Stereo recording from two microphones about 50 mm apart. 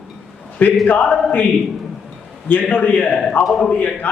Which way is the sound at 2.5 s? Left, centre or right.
Left.